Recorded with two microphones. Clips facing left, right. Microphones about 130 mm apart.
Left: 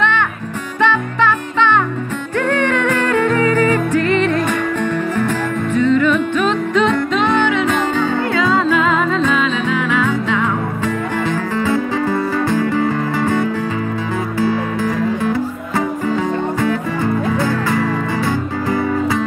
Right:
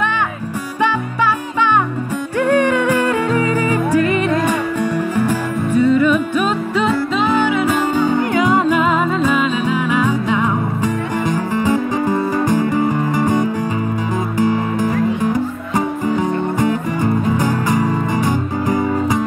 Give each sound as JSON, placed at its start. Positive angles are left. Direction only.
{"t": 0.8, "sound": "music", "side_deg": -10}
{"t": 5.8, "sound": "music", "side_deg": -10}
{"t": 16.6, "sound": "music", "side_deg": -15}